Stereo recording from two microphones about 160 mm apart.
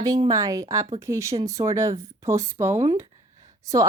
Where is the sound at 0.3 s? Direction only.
20° right (ahead or behind).